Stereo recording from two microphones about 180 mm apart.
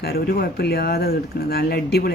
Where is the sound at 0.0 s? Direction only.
60° left (ahead or behind).